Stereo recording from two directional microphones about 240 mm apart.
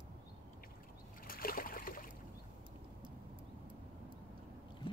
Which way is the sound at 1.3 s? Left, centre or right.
Left.